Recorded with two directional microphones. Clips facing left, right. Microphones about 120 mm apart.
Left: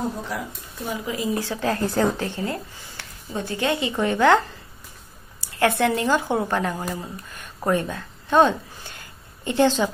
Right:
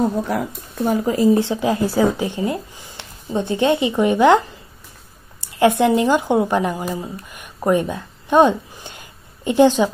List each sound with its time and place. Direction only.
0.3 s speech: 55° right (ahead or behind); by 1.4 s 40° right (ahead or behind)
1.4 s speech: 15° right (ahead or behind)